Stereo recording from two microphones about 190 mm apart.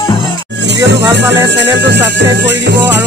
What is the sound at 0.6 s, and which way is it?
Music, 70° right (ahead or behind).